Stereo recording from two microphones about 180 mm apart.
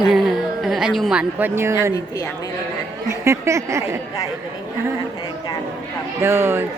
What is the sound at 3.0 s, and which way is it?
Speech, 15° right (ahead or behind).